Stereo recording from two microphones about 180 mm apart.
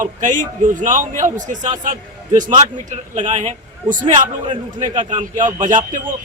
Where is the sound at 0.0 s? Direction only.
45° right (ahead or behind).